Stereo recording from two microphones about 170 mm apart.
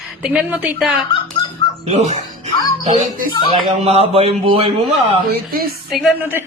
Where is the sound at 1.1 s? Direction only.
30° left (ahead or behind).